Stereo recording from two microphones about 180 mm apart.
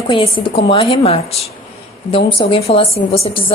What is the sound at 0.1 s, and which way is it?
A woman's voice, 25° left (ahead or behind).